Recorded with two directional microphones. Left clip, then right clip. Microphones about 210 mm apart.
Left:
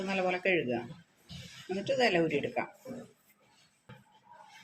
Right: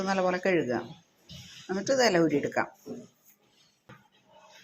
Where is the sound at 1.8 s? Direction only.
20° right (ahead or behind).